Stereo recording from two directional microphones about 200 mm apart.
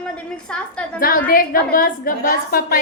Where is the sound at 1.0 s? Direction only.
45° left (ahead or behind).